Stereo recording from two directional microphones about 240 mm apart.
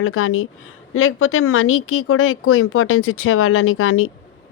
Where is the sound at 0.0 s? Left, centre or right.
Left.